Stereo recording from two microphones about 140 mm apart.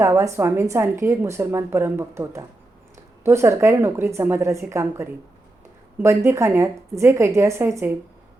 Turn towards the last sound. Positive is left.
turn(degrees=-20)  # may be behind; listen again after turning